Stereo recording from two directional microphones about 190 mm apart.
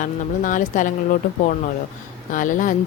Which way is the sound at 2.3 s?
45° left (ahead or behind).